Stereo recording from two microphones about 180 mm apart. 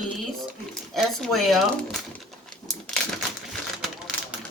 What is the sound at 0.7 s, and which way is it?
Speech, centre (ahead or behind).